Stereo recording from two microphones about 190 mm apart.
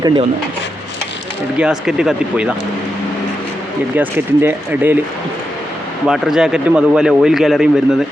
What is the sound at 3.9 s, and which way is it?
Speech, 10° right (ahead or behind).